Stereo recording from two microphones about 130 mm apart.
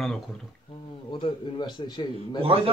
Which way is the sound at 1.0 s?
40° left (ahead or behind).